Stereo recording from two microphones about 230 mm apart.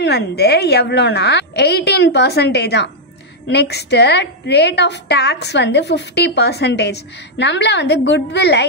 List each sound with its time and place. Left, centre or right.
0.0 s a woman's voice: left